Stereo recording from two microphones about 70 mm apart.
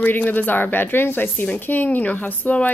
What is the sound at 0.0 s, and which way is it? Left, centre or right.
Speech, left.